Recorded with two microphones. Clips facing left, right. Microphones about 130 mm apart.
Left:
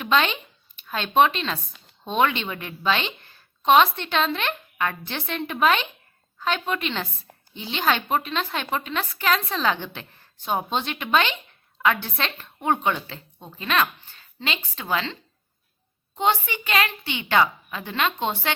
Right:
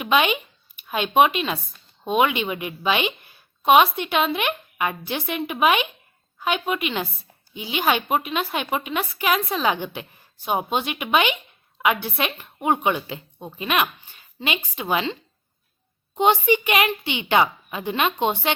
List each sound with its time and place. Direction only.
0.0 s a woman's voice: 10° right (ahead or behind)